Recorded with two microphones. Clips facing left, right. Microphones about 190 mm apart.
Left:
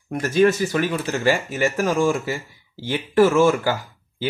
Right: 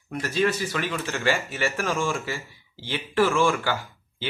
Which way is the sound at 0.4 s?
45° left (ahead or behind).